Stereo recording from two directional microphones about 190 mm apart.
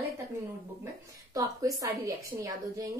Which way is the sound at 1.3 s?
20° right (ahead or behind).